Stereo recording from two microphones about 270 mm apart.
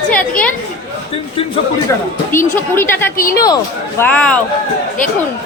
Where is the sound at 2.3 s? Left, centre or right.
Centre.